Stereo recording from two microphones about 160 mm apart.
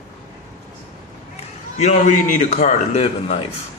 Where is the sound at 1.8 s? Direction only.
45° left (ahead or behind).